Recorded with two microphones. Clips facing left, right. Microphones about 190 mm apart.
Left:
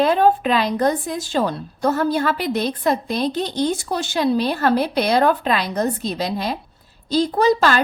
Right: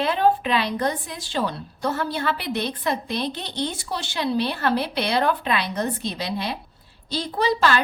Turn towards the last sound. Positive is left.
turn(degrees=45)  # may be behind; listen again after turning